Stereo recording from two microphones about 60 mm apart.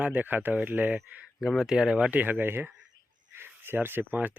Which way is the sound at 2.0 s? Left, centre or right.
Right.